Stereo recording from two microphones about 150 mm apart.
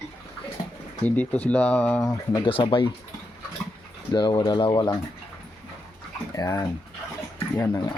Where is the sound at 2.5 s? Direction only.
35° left (ahead or behind).